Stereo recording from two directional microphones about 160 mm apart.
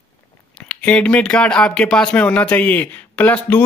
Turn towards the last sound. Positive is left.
turn(degrees=10)  # may be behind; listen again after turning